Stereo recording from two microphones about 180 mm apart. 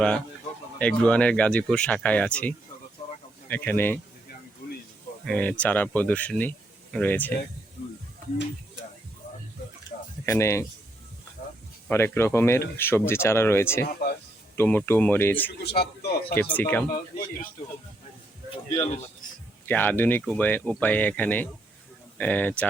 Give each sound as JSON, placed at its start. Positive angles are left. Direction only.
{"t": 0.8, "sound": "speech", "side_deg": 5}
{"t": 4.6, "sound": "a sound", "side_deg": 55}
{"t": 5.2, "sound": "speech", "side_deg": 5}
{"t": 10.2, "sound": "speech", "side_deg": 15}
{"t": 11.9, "sound": "speech", "side_deg": 15}
{"t": 13.8, "sound": "speech", "side_deg": 60}
{"t": 14.5, "sound": "speech", "side_deg": 10}
{"t": 15.6, "sound": "speech", "side_deg": 60}
{"t": 16.3, "sound": "speech", "side_deg": 10}
{"t": 19.6, "sound": "speech", "side_deg": 10}